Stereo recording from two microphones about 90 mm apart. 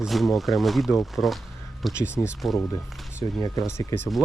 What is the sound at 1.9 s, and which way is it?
Speech, 30° left (ahead or behind).